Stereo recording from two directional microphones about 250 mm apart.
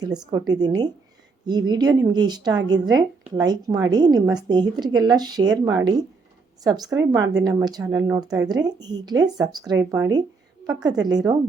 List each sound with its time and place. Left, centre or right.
0.0 s a woman's voice: centre